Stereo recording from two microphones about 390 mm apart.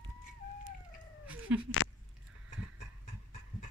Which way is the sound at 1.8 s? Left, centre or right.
Left.